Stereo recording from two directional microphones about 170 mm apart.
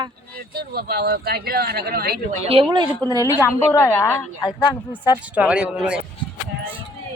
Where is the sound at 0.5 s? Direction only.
65° right (ahead or behind).